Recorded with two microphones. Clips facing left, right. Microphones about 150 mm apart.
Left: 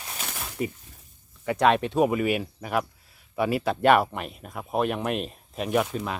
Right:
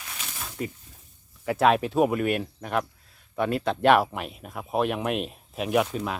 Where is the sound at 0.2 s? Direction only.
60° left (ahead or behind).